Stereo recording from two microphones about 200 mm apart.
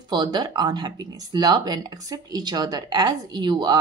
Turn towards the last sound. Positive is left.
turn(degrees=-20)  # may be behind; listen again after turning